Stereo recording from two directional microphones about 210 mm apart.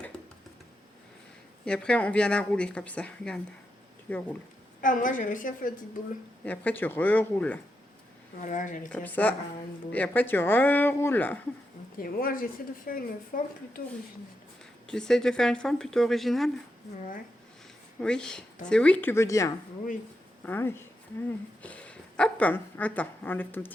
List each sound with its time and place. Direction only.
1.6 s speech: 5° left (ahead or behind)
4.8 s a woman's voice: 40° left (ahead or behind)
6.4 s speech: 5° left (ahead or behind)
8.4 s a woman's voice: 35° left (ahead or behind)
8.9 s speech: 5° left (ahead or behind)
11.9 s speech: 45° left (ahead or behind)
14.8 s speech: 5° left (ahead or behind)
18.0 s a woman's voice: 5° left (ahead or behind)